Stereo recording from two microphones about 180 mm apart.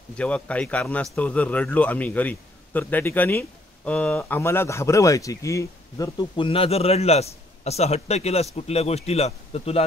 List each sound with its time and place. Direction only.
0.2 s a man's voice: 5° left (ahead or behind); by 9.8 s 35° left (ahead or behind)